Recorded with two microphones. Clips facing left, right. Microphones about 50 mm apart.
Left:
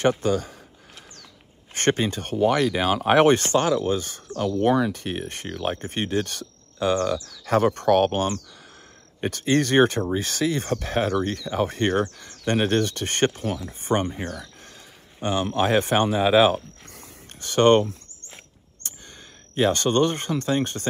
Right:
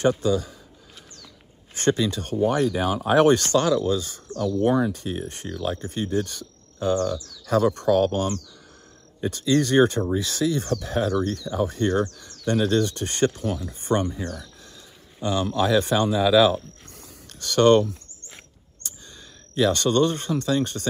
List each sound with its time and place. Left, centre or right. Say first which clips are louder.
0.0 s speech: even; left
1.7 s speech: even; left
2.3 s speech: left 1 dB; left
3.3 s speech: even; left
4.3 s speech: left 1 dB; left
7.4 s speech: left 1 dB; left
13.7 s speech: even; left
14.1 s speech: even; left
15.1 s speech: even; left
19.5 s speech: even; left